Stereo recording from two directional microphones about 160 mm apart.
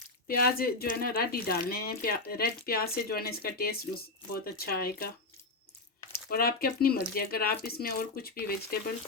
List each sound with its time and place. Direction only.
0.3 s speech: 70° left (ahead or behind)
6.3 s speech: 70° left (ahead or behind)